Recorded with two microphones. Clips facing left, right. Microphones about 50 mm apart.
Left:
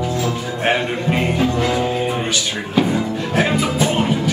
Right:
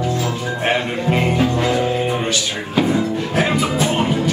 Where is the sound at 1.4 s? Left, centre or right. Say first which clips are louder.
Right 1 dB; centre.